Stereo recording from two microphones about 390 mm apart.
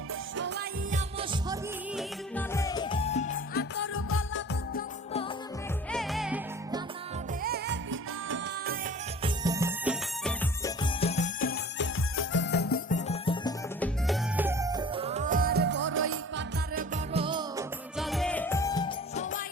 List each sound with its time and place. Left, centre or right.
0.3 s music: right
2.0 s music: centre; by 4.8 s left
5.9 s music: centre
7.4 s music: right
9.2 s music: centre
17.9 s music: centre